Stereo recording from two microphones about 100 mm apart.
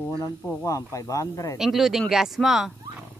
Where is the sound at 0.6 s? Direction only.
35° left (ahead or behind).